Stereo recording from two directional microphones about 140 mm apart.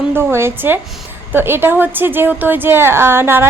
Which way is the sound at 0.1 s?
15° right (ahead or behind).